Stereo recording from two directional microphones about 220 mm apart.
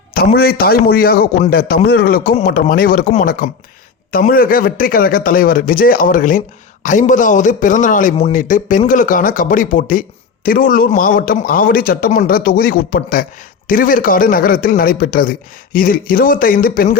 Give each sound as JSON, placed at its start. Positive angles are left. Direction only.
{"t": 0.1, "sound": "a man's voice", "side_deg": 45}